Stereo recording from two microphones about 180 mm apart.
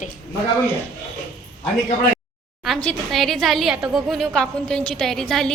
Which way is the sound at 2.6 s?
5° left (ahead or behind).